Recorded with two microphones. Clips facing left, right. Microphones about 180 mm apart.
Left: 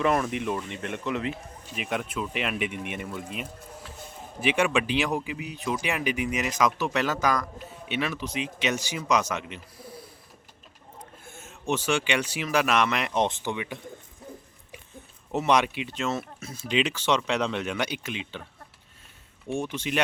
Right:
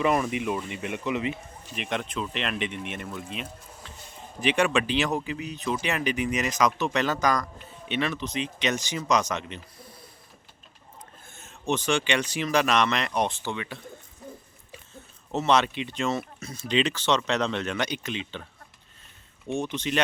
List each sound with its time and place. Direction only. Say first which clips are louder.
0.0 s speech: even; 5° right (ahead or behind)
4.4 s speech: right 1 dB; 10° left (ahead or behind)
11.3 s speech: right 1 dB; 10° left (ahead or behind)
13.1 s speech: left 1 dB; 20° left (ahead or behind)
15.3 s speech: even; 15° left (ahead or behind)
19.5 s speech: right 1 dB; 10° left (ahead or behind)